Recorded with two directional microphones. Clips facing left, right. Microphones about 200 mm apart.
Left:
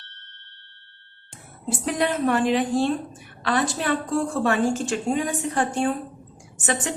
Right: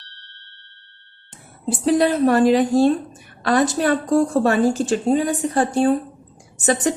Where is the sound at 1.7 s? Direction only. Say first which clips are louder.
Right 7 dB; 35° right (ahead or behind).